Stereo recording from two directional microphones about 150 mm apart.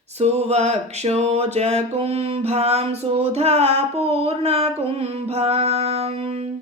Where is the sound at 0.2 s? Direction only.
45° right (ahead or behind).